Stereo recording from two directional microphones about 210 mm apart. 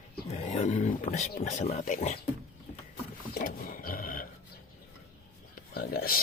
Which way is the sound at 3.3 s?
45° left (ahead or behind).